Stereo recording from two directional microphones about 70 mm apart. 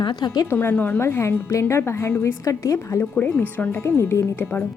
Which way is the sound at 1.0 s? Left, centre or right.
Left.